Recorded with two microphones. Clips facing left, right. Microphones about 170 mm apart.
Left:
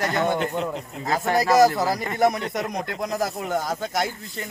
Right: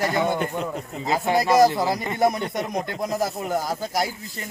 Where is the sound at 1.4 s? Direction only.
Centre (ahead or behind).